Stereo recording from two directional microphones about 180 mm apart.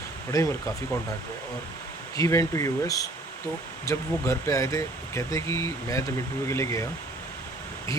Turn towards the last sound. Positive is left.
turn(degrees=15)  # may be behind; listen again after turning